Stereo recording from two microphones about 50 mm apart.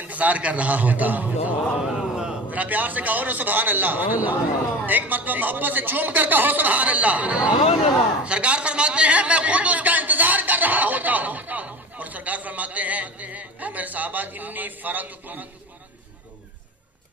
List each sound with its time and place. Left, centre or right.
0.0 s a man's voice: right
1.8 s a sound: centre
2.5 s a man's voice: right